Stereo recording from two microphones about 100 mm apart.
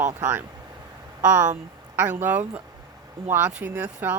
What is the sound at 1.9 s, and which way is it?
Speech, 15° right (ahead or behind).